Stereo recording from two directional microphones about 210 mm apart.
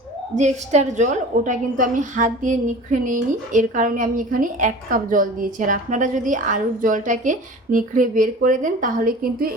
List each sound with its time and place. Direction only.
0.3 s a woman's voice: 35° right (ahead or behind)